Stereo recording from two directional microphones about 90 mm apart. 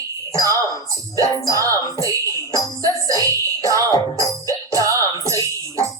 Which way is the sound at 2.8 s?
40° right (ahead or behind).